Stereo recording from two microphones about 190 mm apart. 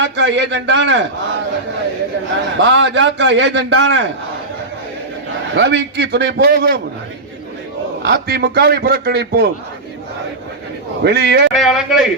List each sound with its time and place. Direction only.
0.0 s a man's voice: 70° right (ahead or behind)
2.6 s a man's voice: 80° right
5.5 s a man's voice: 65° right (ahead or behind)
8.0 s a man's voice: 60° right (ahead or behind)
11.0 s a man's voice: 60° right (ahead or behind)
11.5 s speech: centre (ahead or behind)